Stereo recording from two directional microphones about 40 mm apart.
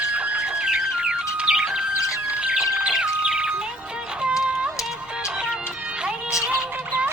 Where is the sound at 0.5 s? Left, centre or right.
Right.